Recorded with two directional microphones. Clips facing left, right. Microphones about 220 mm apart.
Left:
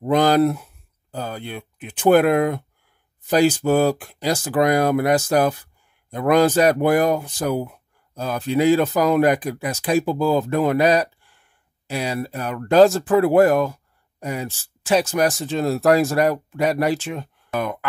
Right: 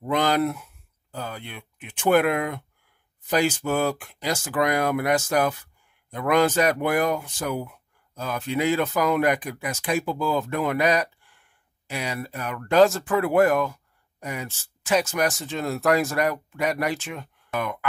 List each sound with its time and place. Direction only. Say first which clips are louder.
0.0 s speech: left 6 dB; 35° left (ahead or behind)